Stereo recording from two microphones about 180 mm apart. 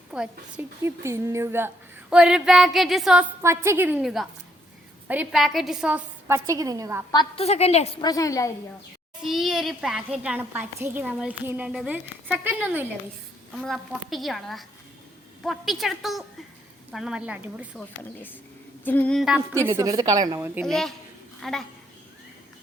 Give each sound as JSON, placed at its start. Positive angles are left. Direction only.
{"t": 0.1, "sound": "a woman's voice", "side_deg": -5}
{"t": 3.4, "sound": "a child's voice", "side_deg": -15}
{"t": 7.1, "sound": "a woman's voice", "side_deg": 30}
{"t": 8.0, "sound": "a woman's voice", "side_deg": 20}
{"t": 9.2, "sound": "a child's voice", "side_deg": 0}
{"t": 13.6, "sound": "a woman's voice", "side_deg": 0}
{"t": 17.7, "sound": "a woman's voice", "side_deg": 10}
{"t": 19.4, "sound": "a woman's voice", "side_deg": -15}
{"t": 20.7, "sound": "a woman's voice", "side_deg": 0}